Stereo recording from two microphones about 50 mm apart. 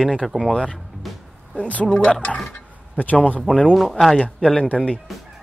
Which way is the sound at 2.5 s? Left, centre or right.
Left.